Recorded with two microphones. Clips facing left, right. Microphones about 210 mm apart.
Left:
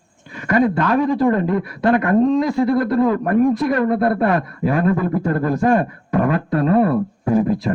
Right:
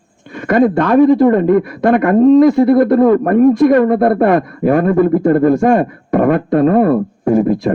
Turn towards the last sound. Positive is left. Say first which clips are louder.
# right 5 dB
turn(degrees=-50)  # may be behind; listen again after turning